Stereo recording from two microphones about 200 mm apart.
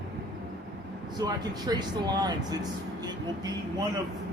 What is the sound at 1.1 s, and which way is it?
Speech, 20° right (ahead or behind).